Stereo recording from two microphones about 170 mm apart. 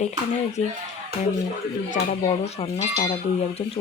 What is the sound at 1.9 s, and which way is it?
Speech, 40° left (ahead or behind).